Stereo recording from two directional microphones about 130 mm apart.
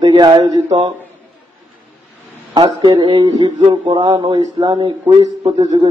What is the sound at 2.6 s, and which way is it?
Speech, 35° right (ahead or behind).